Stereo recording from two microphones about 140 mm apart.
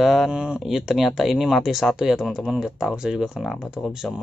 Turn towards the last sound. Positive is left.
turn(degrees=0)  # may be behind; listen again after turning